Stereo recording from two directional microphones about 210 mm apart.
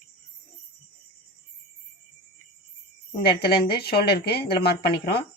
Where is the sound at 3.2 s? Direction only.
50° left (ahead or behind).